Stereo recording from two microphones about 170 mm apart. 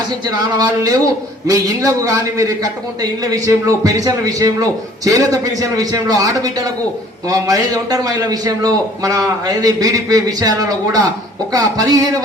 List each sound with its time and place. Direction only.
0.3 s a man's voice: 20° right (ahead or behind)